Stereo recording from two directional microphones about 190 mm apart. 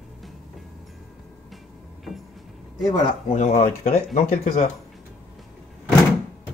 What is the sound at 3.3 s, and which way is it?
Speech, 35° left (ahead or behind).